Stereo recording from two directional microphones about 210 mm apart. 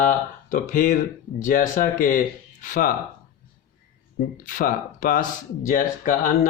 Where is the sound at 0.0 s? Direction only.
40° left (ahead or behind).